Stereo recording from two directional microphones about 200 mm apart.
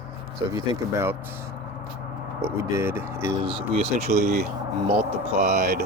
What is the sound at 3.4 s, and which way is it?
Speech, 30° right (ahead or behind).